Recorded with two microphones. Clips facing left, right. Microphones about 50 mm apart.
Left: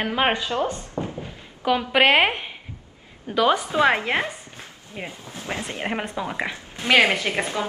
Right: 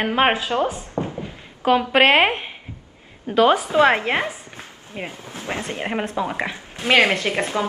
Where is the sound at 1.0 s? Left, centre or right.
Right.